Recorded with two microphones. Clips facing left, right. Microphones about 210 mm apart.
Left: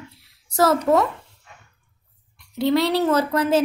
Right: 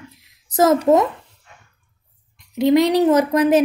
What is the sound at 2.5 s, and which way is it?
A woman's voice, 20° right (ahead or behind).